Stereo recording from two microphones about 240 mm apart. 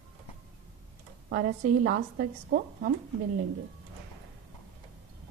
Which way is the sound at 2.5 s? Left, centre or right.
Right.